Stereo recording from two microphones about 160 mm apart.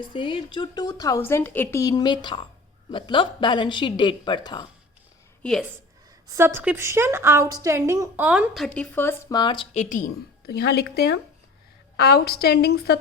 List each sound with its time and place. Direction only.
0.0 s a woman's voice: 30° left (ahead or behind)
5.4 s a woman's voice: 5° left (ahead or behind)
6.3 s a woman's voice: 15° right (ahead or behind)
8.2 s a woman's voice: 5° right (ahead or behind)
8.6 s a woman's voice: 10° left (ahead or behind)
9.3 s a woman's voice: 30° left (ahead or behind)
9.7 s speech: 55° left (ahead or behind); by 13.0 s 90° left